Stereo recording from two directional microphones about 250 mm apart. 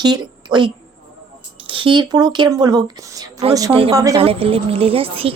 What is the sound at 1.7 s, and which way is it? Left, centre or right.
Speech, centre.